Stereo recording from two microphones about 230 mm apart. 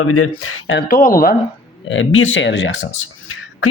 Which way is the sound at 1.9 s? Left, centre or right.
Left.